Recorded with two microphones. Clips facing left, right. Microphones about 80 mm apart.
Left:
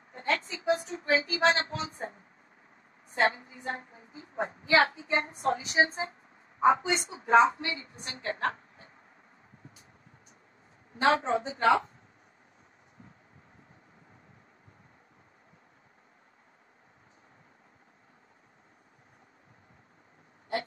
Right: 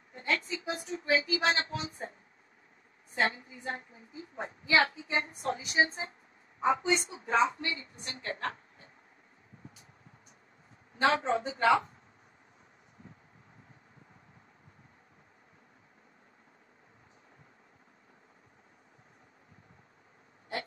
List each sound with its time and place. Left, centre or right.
0.1 s a woman's voice: left
11.0 s speech: left